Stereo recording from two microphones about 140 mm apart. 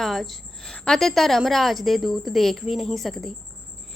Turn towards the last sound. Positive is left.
turn(degrees=0)  # may be behind; listen again after turning